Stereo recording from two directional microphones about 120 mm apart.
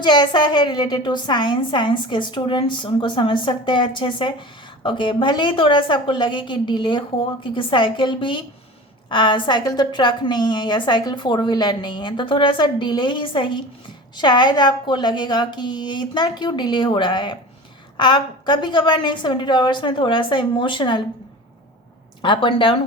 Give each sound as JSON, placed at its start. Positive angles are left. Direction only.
{"t": 0.0, "sound": "a woman's voice", "side_deg": 40}
{"t": 22.2, "sound": "a woman's voice", "side_deg": 45}